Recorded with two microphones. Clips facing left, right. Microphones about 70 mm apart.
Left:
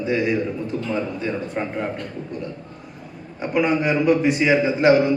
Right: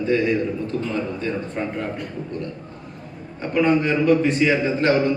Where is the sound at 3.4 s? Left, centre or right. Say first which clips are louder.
Right 1 dB; centre.